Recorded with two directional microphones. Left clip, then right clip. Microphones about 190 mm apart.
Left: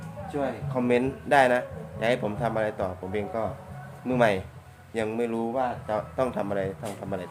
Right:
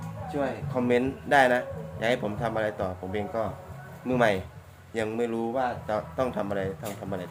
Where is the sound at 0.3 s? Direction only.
15° left (ahead or behind).